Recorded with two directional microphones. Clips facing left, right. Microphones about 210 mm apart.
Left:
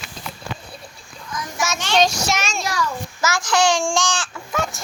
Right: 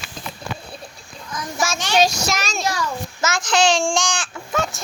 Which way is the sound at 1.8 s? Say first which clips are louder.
Even; 10° right (ahead or behind).